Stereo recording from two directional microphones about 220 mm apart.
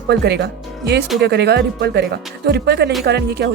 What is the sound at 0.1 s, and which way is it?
Speech, 50° right (ahead or behind).